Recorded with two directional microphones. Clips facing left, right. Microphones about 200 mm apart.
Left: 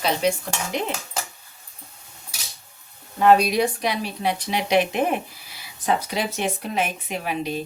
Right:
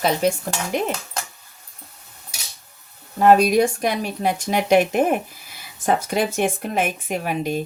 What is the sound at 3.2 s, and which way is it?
Speech, 45° right (ahead or behind).